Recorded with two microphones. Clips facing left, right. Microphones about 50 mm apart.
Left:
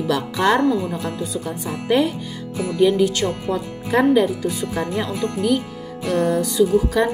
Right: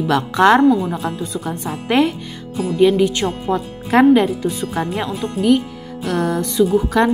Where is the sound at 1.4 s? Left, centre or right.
Right.